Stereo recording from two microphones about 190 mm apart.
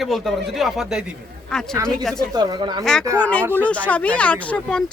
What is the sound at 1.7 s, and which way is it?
Speech, 15° right (ahead or behind).